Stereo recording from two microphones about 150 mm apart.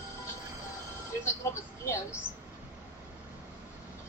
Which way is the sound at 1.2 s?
20° left (ahead or behind).